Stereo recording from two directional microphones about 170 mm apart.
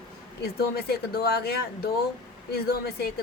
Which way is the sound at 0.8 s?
65° left (ahead or behind).